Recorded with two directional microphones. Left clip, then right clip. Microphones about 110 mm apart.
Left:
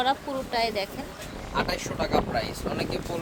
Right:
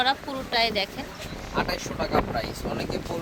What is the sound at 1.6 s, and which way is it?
Speech, 35° left (ahead or behind).